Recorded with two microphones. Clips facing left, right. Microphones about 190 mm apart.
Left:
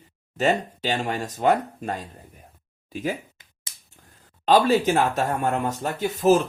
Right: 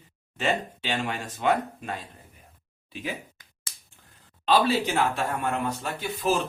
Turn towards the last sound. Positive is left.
turn(degrees=45)  # may be behind; listen again after turning